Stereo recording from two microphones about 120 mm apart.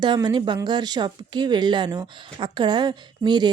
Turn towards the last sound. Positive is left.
turn(degrees=-35)  # may be behind; listen again after turning